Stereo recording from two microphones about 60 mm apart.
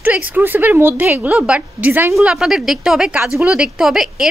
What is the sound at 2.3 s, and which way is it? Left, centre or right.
Speech, centre.